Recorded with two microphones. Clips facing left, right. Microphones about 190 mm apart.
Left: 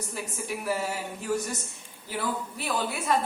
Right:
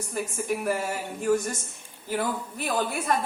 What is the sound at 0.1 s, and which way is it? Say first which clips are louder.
A woman's voice: right 8 dB; 50° right (ahead or behind).